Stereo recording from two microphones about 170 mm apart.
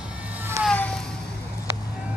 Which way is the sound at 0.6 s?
5° left (ahead or behind).